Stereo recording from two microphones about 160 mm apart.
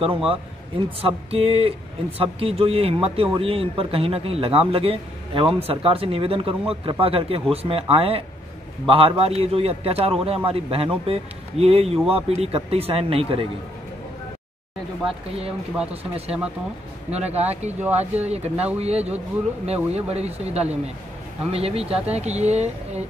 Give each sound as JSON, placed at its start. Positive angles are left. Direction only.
{"t": 0.0, "sound": "speech", "side_deg": -35}
{"t": 17.1, "sound": "speech", "side_deg": -40}